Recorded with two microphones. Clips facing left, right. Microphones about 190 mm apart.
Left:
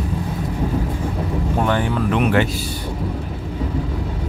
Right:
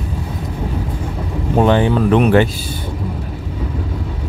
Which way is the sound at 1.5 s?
20° right (ahead or behind).